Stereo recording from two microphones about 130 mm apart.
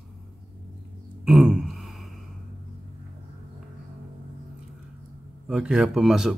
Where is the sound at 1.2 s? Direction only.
5° right (ahead or behind).